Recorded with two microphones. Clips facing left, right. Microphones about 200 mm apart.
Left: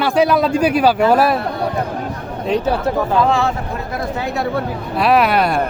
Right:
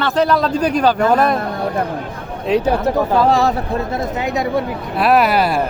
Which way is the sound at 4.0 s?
15° right (ahead or behind).